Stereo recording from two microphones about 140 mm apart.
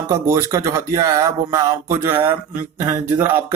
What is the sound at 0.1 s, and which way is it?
Speech, 20° right (ahead or behind).